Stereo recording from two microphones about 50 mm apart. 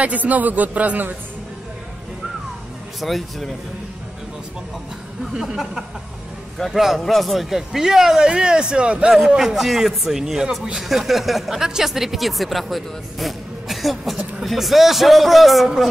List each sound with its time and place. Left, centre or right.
0.0 s a man's voice: right
3.0 s speech: centre
5.2 s speech: centre
6.6 s speech: centre; by 9.1 s right
9.4 s speech: centre